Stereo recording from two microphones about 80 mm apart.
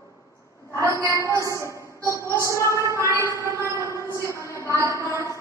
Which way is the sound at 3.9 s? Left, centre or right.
Left.